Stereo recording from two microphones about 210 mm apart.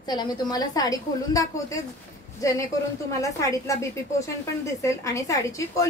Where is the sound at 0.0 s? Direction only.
20° left (ahead or behind).